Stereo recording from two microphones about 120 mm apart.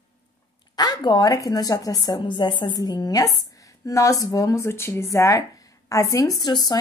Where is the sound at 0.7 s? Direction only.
35° left (ahead or behind).